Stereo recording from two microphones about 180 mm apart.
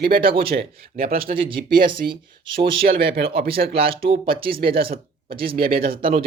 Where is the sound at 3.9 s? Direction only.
30° right (ahead or behind).